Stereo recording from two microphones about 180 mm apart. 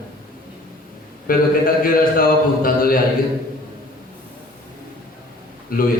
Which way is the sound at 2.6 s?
55° left (ahead or behind).